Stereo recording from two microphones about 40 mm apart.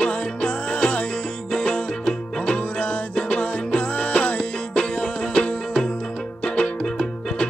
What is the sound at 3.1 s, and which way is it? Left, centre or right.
Music, left.